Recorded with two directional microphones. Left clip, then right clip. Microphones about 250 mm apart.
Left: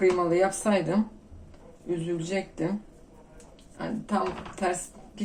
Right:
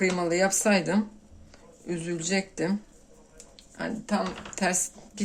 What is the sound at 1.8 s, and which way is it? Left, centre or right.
Speech, right.